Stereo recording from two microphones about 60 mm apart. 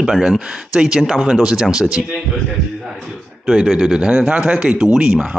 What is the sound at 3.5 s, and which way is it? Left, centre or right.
Speech, centre.